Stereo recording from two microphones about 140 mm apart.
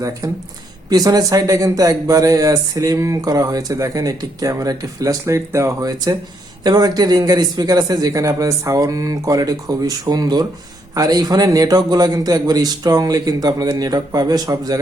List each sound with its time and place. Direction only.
0.9 s speech: 30° right (ahead or behind)